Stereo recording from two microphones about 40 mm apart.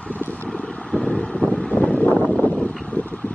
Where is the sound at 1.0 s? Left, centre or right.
Left.